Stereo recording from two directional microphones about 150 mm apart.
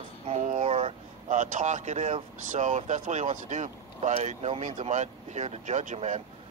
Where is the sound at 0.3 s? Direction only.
55° right (ahead or behind).